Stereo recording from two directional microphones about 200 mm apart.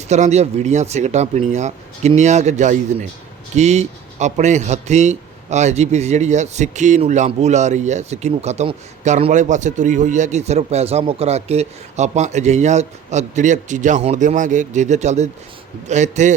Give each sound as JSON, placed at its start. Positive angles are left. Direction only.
{"t": 0.1, "sound": "speech", "side_deg": -35}